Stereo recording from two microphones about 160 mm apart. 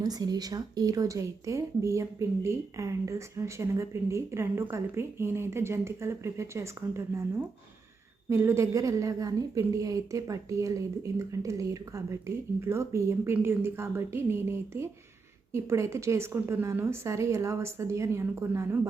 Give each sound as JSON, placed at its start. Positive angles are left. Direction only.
{"t": 0.0, "sound": "a woman's voice", "side_deg": -25}